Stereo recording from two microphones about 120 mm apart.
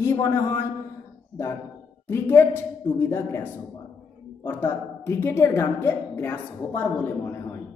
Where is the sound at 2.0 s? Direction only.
20° left (ahead or behind).